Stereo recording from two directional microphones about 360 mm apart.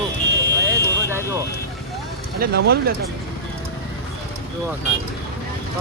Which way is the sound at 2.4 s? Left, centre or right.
Right.